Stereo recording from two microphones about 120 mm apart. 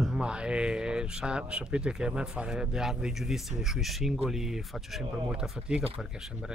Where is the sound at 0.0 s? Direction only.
5° right (ahead or behind).